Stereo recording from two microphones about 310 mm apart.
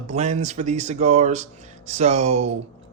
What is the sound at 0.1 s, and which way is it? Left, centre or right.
Speech, right.